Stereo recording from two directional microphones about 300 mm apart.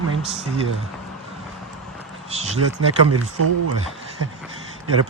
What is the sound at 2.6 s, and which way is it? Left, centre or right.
Speech, right.